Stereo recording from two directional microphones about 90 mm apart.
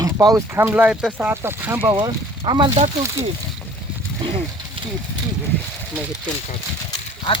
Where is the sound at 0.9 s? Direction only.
10° right (ahead or behind).